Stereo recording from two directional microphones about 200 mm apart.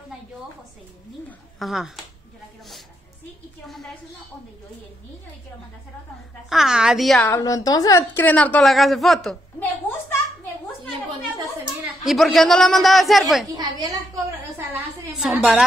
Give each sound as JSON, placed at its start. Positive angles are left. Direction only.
{"t": 1.6, "sound": "a man's voice", "side_deg": 0}
{"t": 3.6, "sound": "a man's voice", "side_deg": 0}
{"t": 6.5, "sound": "a man's voice", "side_deg": -5}
{"t": 7.2, "sound": "a woman's voice", "side_deg": 15}
{"t": 12.0, "sound": "a man's voice", "side_deg": 0}
{"t": 13.6, "sound": "a sound", "side_deg": -20}
{"t": 14.7, "sound": "a sound", "side_deg": -5}